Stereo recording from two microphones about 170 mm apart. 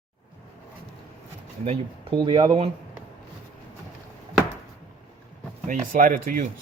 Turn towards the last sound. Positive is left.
turn(degrees=-55)  # may be behind; listen again after turning